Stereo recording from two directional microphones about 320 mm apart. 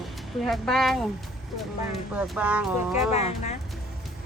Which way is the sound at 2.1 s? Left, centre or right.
Centre.